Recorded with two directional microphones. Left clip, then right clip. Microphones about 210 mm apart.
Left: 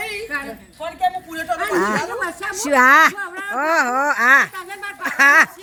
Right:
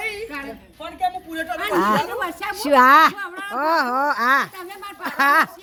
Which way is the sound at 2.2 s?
35° right (ahead or behind).